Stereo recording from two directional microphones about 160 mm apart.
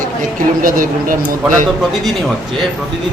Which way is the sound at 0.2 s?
60° right (ahead or behind).